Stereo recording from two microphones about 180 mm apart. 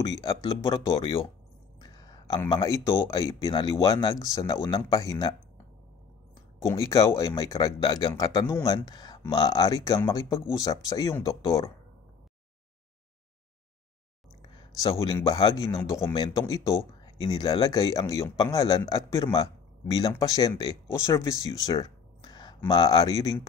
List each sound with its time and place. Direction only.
0.0 s a man's voice: 20° left (ahead or behind)
6.6 s a man's voice: 15° left (ahead or behind)
14.8 s a man's voice: 20° left (ahead or behind)